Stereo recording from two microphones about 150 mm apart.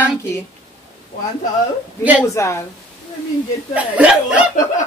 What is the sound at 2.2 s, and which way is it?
Speech, 20° left (ahead or behind).